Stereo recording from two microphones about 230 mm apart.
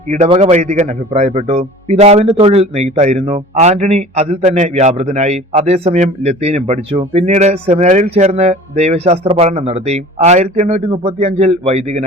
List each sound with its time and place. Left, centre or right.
0.1 s a man's voice: right